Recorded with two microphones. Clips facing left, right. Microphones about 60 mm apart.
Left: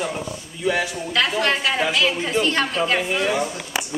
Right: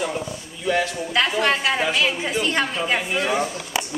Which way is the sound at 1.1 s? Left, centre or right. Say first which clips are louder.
Even; centre.